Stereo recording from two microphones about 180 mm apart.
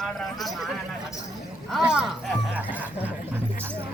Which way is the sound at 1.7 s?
5° right (ahead or behind).